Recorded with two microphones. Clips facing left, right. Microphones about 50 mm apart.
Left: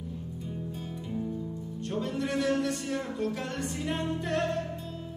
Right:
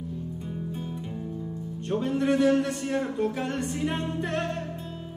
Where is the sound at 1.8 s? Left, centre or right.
Right.